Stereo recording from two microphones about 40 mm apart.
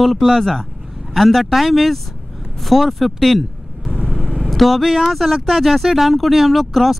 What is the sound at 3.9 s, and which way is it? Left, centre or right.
Vehicle, left.